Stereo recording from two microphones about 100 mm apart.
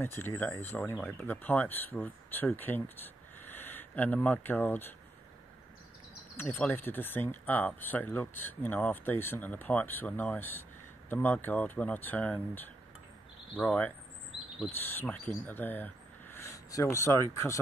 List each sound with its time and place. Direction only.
0.0 s speech: 20° left (ahead or behind)
6.3 s speech: 20° left (ahead or behind)